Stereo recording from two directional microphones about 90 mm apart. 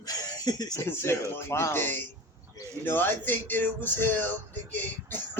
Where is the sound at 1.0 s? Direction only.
30° left (ahead or behind).